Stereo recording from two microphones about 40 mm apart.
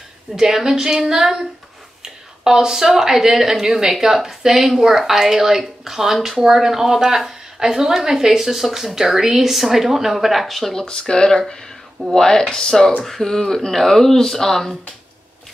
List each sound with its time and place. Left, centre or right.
0.4 s speech: centre
10.8 s speech: centre